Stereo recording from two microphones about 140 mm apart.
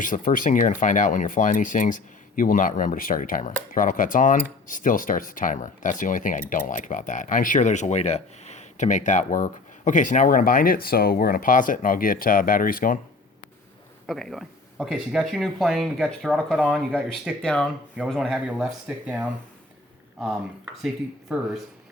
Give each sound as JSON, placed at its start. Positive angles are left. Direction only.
{"t": 0.0, "sound": "speech", "side_deg": 70}
{"t": 14.1, "sound": "speech", "side_deg": 0}
{"t": 20.8, "sound": "speech", "side_deg": -5}